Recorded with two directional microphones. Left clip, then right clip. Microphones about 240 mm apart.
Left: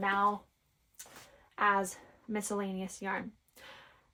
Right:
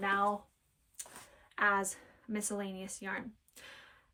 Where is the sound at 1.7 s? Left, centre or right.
Centre.